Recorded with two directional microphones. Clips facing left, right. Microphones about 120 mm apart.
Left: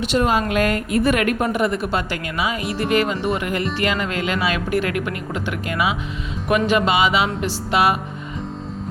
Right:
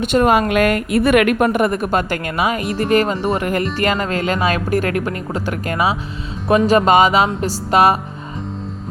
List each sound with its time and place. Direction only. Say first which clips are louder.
0.1 s a woman's voice: right 5 dB; 55° right (ahead or behind)